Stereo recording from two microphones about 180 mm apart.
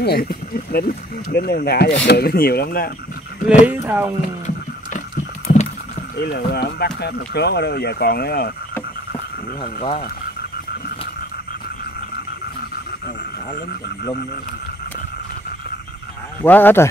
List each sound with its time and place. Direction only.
0.0 s speech: 60° left (ahead or behind)
3.6 s speech: 10° right (ahead or behind)
5.5 s rowboat: 35° left (ahead or behind)
6.1 s speech: 65° left (ahead or behind)
9.8 s speech: 35° left (ahead or behind)
16.4 s speech: 10° left (ahead or behind)